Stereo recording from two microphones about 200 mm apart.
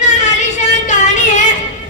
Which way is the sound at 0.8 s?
35° left (ahead or behind).